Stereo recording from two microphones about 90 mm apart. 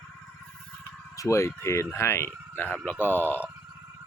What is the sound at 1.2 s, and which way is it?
Speech, 35° left (ahead or behind).